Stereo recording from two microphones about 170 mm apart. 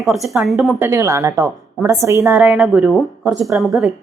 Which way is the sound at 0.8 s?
15° right (ahead or behind).